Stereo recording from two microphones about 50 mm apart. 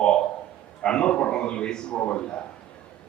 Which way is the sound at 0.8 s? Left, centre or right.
Centre.